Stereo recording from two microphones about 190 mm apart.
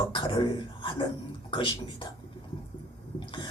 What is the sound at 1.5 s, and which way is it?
Speech, 25° left (ahead or behind).